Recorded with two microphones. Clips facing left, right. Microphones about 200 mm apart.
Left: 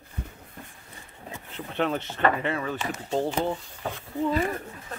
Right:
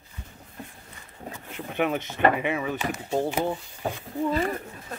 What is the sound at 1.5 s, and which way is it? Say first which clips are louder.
Speech: right 1 dB; 10° right (ahead or behind).